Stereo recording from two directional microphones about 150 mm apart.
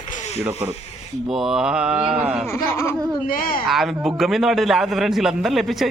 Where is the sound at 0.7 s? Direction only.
45° left (ahead or behind).